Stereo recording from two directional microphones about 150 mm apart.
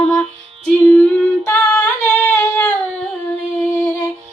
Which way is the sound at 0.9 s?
10° left (ahead or behind).